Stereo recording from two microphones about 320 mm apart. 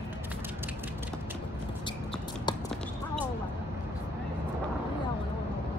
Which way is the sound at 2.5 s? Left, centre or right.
Centre.